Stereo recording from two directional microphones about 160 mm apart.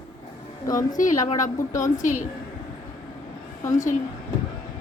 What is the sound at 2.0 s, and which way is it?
Speech, 55° left (ahead or behind).